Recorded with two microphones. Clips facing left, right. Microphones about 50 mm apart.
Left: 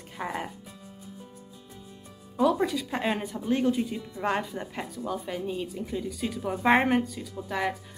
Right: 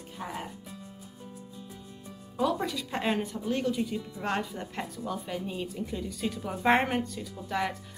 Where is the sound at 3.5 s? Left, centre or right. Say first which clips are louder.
Left 5 dB; centre.